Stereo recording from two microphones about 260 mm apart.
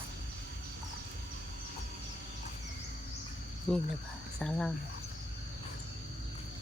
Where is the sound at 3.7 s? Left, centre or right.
Centre.